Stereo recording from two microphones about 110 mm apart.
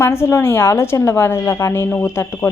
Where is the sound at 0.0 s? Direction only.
25° left (ahead or behind).